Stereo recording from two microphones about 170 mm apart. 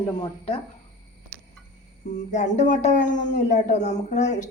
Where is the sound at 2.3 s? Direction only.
45° left (ahead or behind).